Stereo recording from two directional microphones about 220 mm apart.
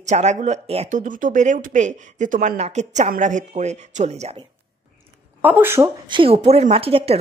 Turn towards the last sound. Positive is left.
turn(degrees=-25)  # may be behind; listen again after turning